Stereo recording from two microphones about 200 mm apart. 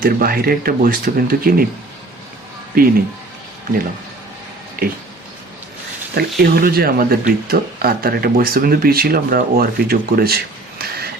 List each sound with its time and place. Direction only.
0.0 s speech: 45° right (ahead or behind)
4.8 s speech: 45° right (ahead or behind)
6.1 s speech: 50° right (ahead or behind)